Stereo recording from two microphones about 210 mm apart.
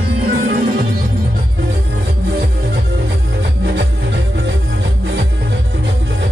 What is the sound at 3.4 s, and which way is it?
Music, 50° right (ahead or behind).